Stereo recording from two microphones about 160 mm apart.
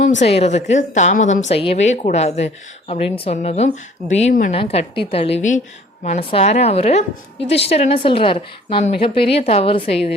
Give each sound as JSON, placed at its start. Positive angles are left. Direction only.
{"t": 0.0, "sound": "a woman's voice", "side_deg": 45}
{"t": 4.5, "sound": "a woman's voice", "side_deg": 40}